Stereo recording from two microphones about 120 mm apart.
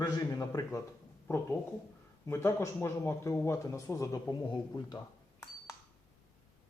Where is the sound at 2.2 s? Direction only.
25° left (ahead or behind).